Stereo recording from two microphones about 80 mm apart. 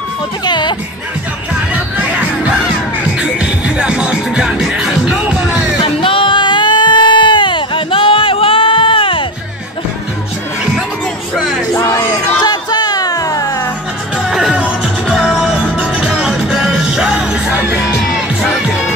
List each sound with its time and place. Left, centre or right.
0.5 s music: left
1.7 s music: centre
5.8 s a sound: left
11.3 s music: centre
11.7 s crowd: left
12.4 s music: left
14.1 s music: centre